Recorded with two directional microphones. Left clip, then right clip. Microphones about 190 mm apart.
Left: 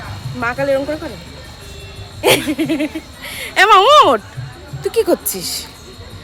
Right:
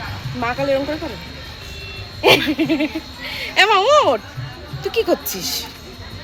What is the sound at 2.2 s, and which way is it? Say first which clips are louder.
Speech: even; 5° left (ahead or behind).